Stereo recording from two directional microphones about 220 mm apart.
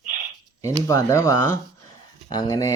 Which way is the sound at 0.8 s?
15° left (ahead or behind).